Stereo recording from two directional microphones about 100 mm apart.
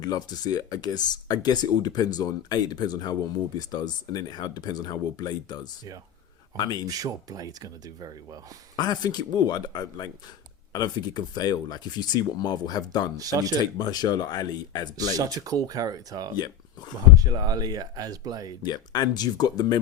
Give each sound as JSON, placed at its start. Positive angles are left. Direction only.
{"t": 0.0, "sound": "speech", "side_deg": 40}
{"t": 6.6, "sound": "speech", "side_deg": 40}
{"t": 6.8, "sound": "speech", "side_deg": -35}
{"t": 8.7, "sound": "speech", "side_deg": 40}
{"t": 13.1, "sound": "speech", "side_deg": -35}
{"t": 13.7, "sound": "speech", "side_deg": 45}
{"t": 14.9, "sound": "speech", "side_deg": -40}
{"t": 18.6, "sound": "speech", "side_deg": 45}